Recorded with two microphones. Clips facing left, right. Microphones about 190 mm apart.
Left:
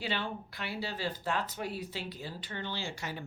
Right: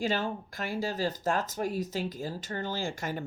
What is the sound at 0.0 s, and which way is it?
Speech, 45° right (ahead or behind).